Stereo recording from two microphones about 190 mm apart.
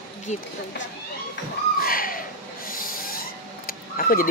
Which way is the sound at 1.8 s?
50° left (ahead or behind).